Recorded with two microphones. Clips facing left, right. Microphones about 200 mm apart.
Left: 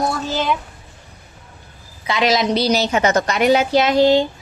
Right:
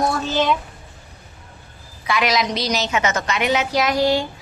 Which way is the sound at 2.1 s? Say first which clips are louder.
Left 3 dB; 25° left (ahead or behind).